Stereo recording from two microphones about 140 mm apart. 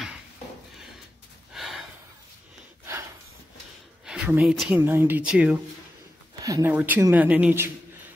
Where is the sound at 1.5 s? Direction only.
Centre (ahead or behind).